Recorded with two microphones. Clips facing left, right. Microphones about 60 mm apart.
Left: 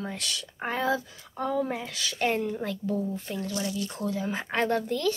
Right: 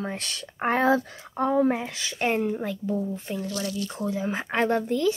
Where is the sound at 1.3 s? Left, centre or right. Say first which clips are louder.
Right 6 dB; right.